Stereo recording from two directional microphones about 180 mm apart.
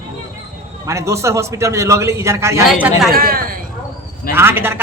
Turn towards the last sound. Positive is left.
turn(degrees=-10)  # may be behind; listen again after turning